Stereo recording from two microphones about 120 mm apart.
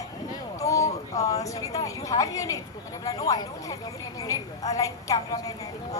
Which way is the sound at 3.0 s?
30° left (ahead or behind).